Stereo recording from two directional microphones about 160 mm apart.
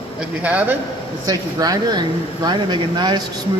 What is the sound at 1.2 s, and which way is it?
A man's voice, 25° right (ahead or behind).